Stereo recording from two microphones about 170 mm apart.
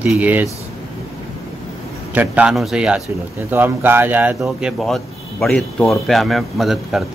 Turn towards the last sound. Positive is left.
turn(degrees=0)  # may be behind; listen again after turning